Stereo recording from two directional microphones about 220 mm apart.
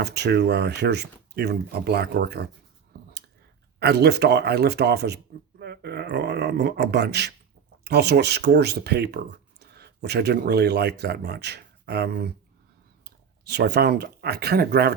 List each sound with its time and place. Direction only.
0.0 s speech: 50° right (ahead or behind)
2.9 s a sound: 45° right (ahead or behind)
3.8 s speech: 50° right (ahead or behind)